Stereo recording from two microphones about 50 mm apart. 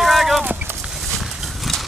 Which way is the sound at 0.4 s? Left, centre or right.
Right.